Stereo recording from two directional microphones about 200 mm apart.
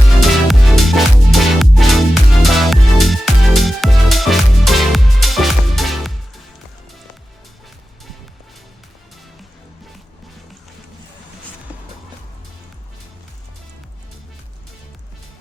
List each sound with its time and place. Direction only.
0.2 s music: centre (ahead or behind)